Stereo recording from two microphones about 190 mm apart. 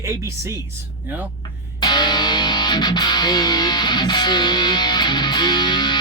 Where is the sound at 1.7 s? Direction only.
25° left (ahead or behind).